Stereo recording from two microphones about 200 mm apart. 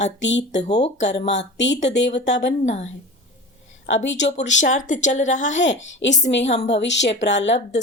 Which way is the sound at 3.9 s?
65° left (ahead or behind).